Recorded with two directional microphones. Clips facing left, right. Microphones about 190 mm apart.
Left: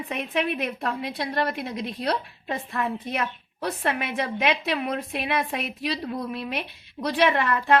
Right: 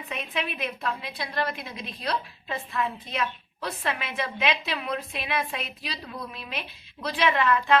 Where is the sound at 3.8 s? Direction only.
60° left (ahead or behind).